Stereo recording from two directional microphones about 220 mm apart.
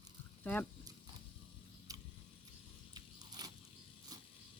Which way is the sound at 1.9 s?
15° right (ahead or behind).